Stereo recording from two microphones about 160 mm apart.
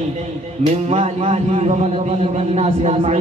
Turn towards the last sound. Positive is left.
turn(degrees=-40)  # may be behind; listen again after turning